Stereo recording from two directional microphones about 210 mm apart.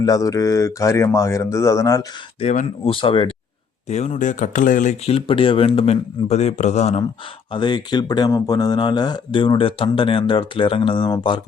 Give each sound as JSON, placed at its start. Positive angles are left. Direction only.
{"t": 0.0, "sound": "speech", "side_deg": 15}
{"t": 2.4, "sound": "speech", "side_deg": 30}